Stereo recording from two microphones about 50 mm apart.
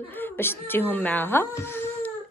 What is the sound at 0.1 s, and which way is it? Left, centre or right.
Speech, left.